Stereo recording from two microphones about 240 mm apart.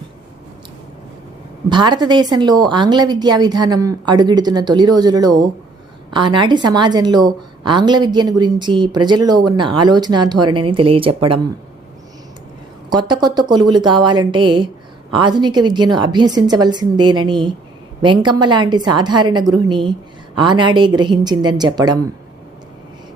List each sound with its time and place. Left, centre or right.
1.7 s a woman's voice: centre
12.9 s a woman's voice: centre